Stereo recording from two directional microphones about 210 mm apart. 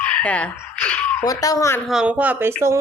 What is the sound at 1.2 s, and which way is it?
Speech, 15° left (ahead or behind).